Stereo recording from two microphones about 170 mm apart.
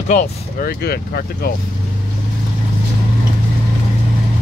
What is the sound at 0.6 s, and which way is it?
Speech, 60° left (ahead or behind).